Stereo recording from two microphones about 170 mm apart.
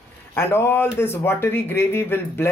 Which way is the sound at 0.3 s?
15° left (ahead or behind).